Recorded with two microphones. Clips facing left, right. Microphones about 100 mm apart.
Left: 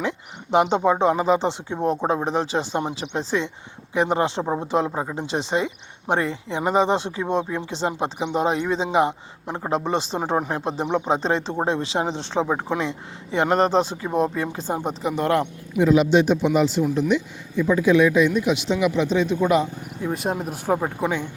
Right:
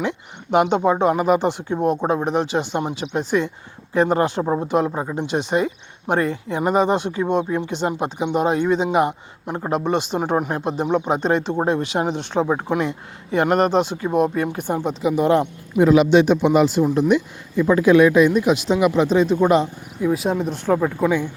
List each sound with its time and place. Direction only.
0.5 s speech: 30° left (ahead or behind)
15.0 s speech: 10° right (ahead or behind)
15.3 s speech: 20° right (ahead or behind)
15.8 s speech: 65° right (ahead or behind); by 19.6 s 35° right (ahead or behind)
20.1 s speech: centre (ahead or behind)
21.0 s speech: 15° left (ahead or behind)